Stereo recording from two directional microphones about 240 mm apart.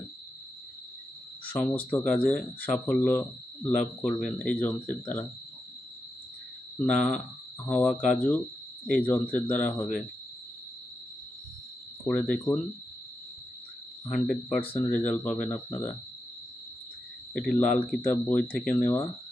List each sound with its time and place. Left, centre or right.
1.5 s speech: centre
6.7 s speech: centre
12.0 s speech: centre
14.1 s speech: centre
14.6 s speech: left
14.9 s speech: centre
17.6 s speech: centre